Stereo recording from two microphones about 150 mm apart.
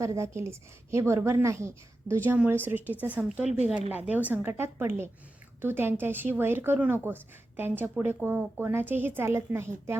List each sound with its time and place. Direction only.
0.0 s a woman's voice: 20° right (ahead or behind)